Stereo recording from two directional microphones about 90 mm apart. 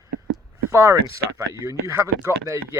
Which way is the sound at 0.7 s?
35° right (ahead or behind).